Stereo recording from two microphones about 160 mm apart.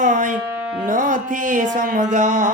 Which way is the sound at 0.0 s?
50° right (ahead or behind).